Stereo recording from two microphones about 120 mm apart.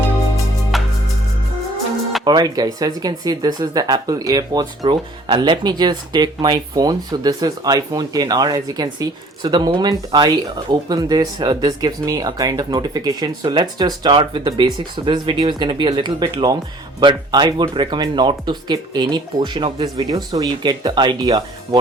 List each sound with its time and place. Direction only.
0.7 s music: centre (ahead or behind)
2.2 s speech: 35° right (ahead or behind)